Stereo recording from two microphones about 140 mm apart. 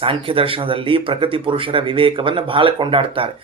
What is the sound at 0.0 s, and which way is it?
Speech, 40° right (ahead or behind).